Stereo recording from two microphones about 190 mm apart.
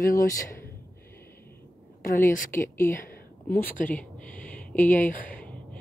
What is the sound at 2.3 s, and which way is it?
Speech, 45° left (ahead or behind).